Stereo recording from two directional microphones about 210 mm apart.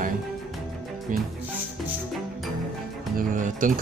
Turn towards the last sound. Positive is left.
turn(degrees=-40)  # may be behind; listen again after turning